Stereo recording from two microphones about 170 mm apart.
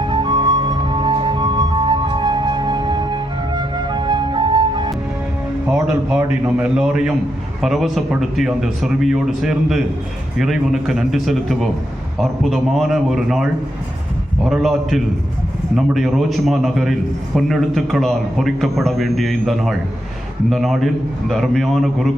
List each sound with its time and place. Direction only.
0.1 s music: 25° right (ahead or behind)
5.6 s a man's voice: 5° right (ahead or behind)